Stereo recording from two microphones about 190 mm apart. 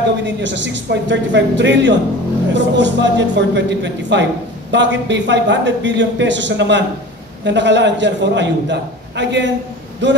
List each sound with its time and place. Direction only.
0.2 s a man's voice: 70° right (ahead or behind)